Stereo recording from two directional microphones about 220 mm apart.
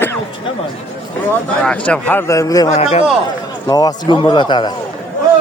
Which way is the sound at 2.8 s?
30° left (ahead or behind).